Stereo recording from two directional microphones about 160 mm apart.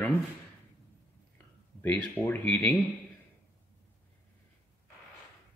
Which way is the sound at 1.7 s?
10° left (ahead or behind).